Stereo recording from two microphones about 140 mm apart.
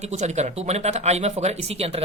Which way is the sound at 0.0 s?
55° right (ahead or behind).